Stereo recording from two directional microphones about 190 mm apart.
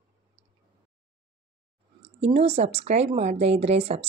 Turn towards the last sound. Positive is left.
turn(degrees=-30)  # may be behind; listen again after turning